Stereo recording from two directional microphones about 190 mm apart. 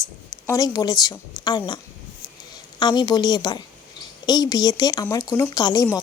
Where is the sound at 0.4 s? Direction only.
20° left (ahead or behind).